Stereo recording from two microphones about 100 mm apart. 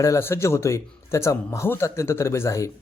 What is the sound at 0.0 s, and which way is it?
A man's voice, 25° left (ahead or behind).